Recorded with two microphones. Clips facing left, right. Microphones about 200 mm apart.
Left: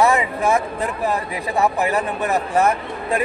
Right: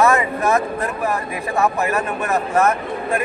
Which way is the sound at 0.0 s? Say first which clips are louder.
Right 1 dB; 15° left (ahead or behind).